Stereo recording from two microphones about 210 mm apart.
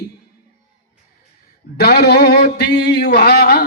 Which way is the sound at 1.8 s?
50° left (ahead or behind).